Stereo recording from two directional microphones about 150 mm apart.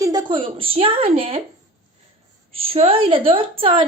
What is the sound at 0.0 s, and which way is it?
A woman's voice, 30° right (ahead or behind).